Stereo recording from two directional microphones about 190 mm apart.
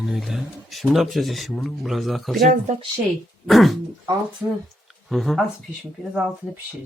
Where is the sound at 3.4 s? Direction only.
Centre (ahead or behind).